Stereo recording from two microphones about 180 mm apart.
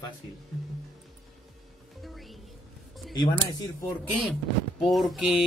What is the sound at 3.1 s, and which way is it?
Speech, 25° left (ahead or behind).